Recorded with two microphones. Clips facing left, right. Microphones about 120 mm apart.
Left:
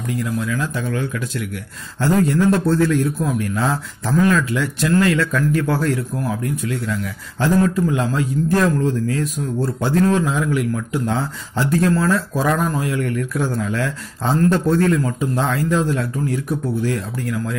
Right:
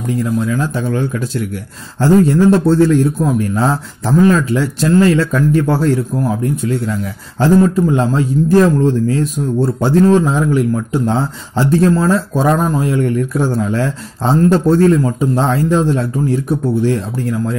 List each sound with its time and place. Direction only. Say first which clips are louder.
0.2 s a man's voice: right 6 dB; 35° right (ahead or behind)